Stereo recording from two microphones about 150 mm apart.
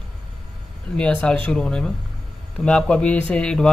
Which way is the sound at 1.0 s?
5° left (ahead or behind).